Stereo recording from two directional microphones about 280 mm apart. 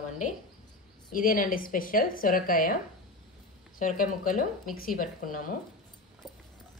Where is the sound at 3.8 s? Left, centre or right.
Left.